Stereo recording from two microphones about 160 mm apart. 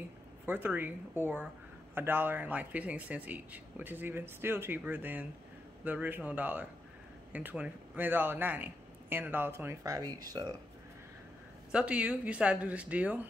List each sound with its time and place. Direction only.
0.5 s speech: 10° right (ahead or behind)
11.7 s speech: 10° right (ahead or behind)